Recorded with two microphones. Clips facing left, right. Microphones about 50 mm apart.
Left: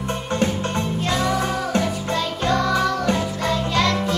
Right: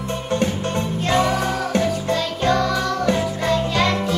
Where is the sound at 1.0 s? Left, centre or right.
Right.